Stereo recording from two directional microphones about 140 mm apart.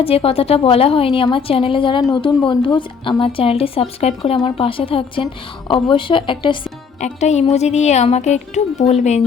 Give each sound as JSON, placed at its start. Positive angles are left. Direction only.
{"t": 0.0, "sound": "speech", "side_deg": 45}
{"t": 7.0, "sound": "a woman's voice", "side_deg": 55}